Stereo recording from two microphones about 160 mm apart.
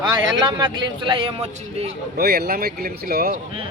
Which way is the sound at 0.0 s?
30° right (ahead or behind).